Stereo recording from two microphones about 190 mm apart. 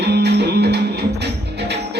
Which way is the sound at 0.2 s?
60° right (ahead or behind).